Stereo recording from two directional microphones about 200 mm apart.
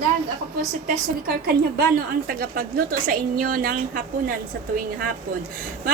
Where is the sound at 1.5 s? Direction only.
50° right (ahead or behind).